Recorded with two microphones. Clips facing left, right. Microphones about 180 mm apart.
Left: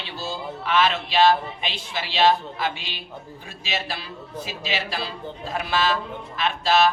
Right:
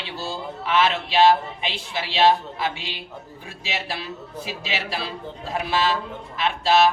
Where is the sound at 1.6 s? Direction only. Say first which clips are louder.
Right 4 dB; 25° right (ahead or behind).